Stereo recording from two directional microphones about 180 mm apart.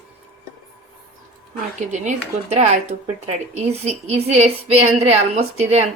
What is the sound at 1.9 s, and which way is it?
Speech, 40° right (ahead or behind).